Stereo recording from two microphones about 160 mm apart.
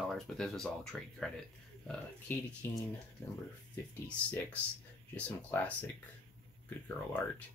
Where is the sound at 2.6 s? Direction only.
15° left (ahead or behind).